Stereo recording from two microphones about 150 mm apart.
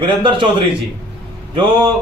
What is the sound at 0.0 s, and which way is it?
Speech, 35° right (ahead or behind).